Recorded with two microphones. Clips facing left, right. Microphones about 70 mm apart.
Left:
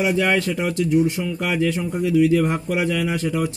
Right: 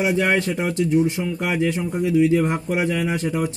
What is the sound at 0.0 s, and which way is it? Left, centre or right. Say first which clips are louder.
A man's voice: even; right.